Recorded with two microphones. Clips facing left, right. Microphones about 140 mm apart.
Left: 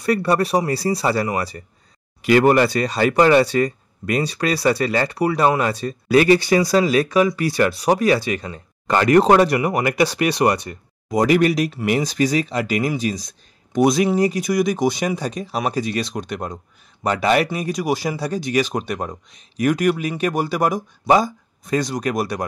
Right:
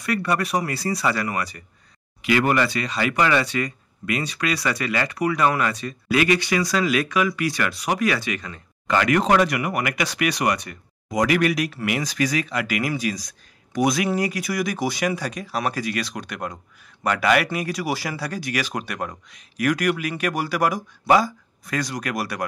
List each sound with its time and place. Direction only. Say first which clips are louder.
0.0 s speech: left 5 dB; 30° left (ahead or behind)